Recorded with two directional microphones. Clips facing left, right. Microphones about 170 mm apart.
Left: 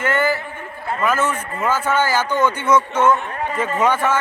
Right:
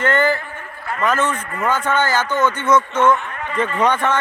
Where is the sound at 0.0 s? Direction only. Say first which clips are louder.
Right 2 dB; 10° left (ahead or behind).